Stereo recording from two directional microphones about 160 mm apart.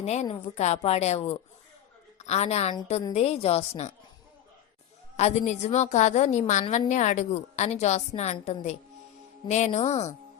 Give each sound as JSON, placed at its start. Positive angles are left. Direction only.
{"t": 0.0, "sound": "a woman's voice", "side_deg": 45}
{"t": 5.1, "sound": "a woman's voice", "side_deg": 45}